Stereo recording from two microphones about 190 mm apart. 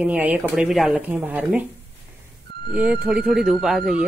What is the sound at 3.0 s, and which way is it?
Speech, centre (ahead or behind).